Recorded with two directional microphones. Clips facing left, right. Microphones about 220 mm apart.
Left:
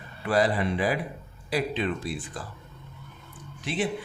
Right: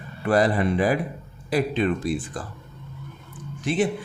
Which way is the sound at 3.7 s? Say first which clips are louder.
Right 7 dB; 45° right (ahead or behind).